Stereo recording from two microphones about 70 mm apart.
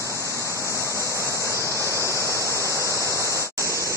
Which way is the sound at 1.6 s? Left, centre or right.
Right.